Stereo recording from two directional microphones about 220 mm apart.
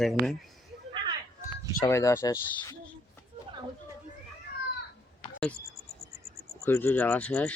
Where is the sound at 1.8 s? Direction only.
15° left (ahead or behind).